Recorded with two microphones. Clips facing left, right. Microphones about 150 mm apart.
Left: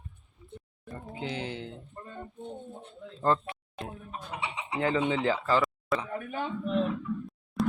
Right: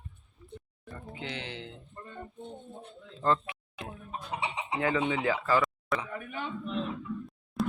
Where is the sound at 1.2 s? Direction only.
40° left (ahead or behind).